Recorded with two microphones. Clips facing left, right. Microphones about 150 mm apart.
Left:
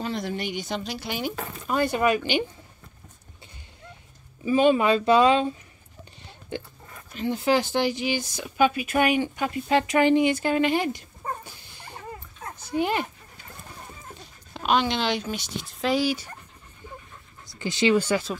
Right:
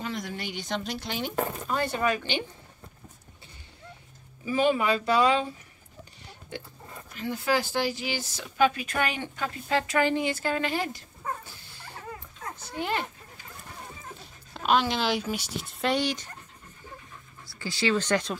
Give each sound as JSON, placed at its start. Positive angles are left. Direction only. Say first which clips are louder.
{"t": 0.0, "sound": "a sound", "louder": "left 4 dB", "side_deg": 30}
{"t": 0.4, "sound": "speech", "louder": "left 4 dB", "side_deg": 15}
{"t": 0.7, "sound": "speech", "louder": "left 1 dB", "side_deg": 5}
{"t": 4.5, "sound": "speech", "louder": "left 5 dB", "side_deg": 20}
{"t": 7.2, "sound": "speech", "louder": "left 4 dB", "side_deg": 20}
{"t": 11.7, "sound": "dog", "louder": "left 2 dB", "side_deg": 20}
{"t": 12.5, "sound": "speech", "louder": "left 6 dB", "side_deg": 15}
{"t": 14.5, "sound": "speech", "louder": "left 1 dB", "side_deg": 0}
{"t": 17.5, "sound": "speech", "louder": "left 5 dB", "side_deg": 20}